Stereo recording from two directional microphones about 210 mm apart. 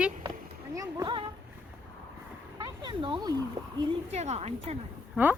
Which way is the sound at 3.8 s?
25° right (ahead or behind).